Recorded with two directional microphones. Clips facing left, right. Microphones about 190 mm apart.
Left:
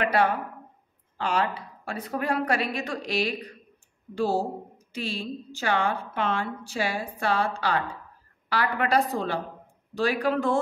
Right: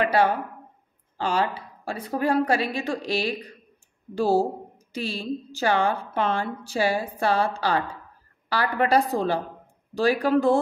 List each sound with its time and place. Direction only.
0.0 s a woman's voice: 30° right (ahead or behind)